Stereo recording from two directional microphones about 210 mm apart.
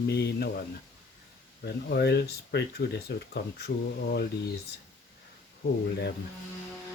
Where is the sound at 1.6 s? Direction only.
50° left (ahead or behind).